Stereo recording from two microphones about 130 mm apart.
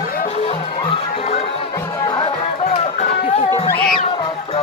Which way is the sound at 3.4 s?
25° left (ahead or behind).